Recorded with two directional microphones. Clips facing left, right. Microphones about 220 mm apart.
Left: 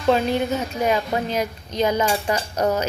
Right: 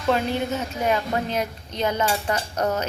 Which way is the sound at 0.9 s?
10° left (ahead or behind).